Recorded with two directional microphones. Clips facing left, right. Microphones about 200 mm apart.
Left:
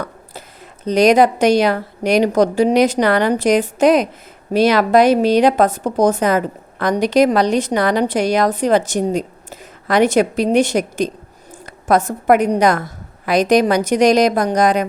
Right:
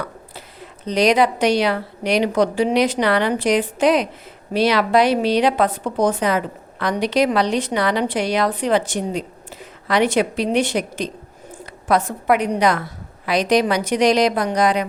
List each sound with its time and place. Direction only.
0.0 s a woman's voice: 45° left (ahead or behind)